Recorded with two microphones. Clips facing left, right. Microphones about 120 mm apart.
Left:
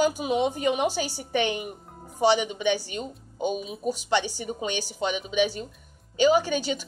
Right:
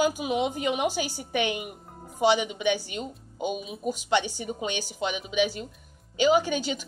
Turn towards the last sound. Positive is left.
turn(degrees=-15)  # may be behind; listen again after turning